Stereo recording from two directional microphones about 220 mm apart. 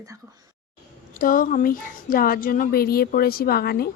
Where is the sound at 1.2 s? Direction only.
40° left (ahead or behind).